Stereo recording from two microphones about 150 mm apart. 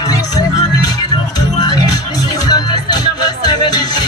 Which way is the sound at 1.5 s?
25° left (ahead or behind).